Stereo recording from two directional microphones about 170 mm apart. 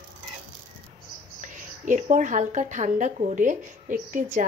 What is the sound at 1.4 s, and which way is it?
A woman's voice, 50° right (ahead or behind).